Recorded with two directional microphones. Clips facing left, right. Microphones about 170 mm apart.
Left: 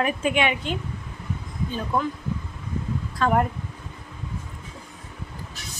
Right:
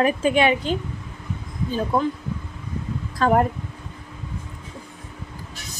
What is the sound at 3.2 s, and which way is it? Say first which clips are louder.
Speech: right 3 dB; 35° right (ahead or behind).